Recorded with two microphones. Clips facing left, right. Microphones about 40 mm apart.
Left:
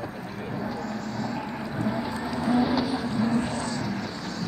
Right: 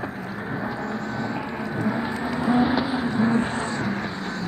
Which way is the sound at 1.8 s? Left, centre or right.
Right.